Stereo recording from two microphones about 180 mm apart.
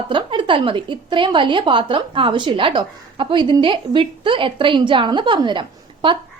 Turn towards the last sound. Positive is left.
turn(degrees=-25)  # may be behind; listen again after turning